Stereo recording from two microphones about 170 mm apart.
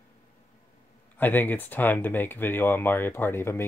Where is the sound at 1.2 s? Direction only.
10° left (ahead or behind).